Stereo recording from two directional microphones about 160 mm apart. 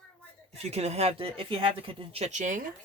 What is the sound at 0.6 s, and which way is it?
Speech, 40° right (ahead or behind).